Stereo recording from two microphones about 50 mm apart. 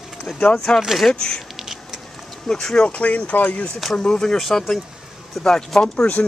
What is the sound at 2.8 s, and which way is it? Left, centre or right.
Speech, left.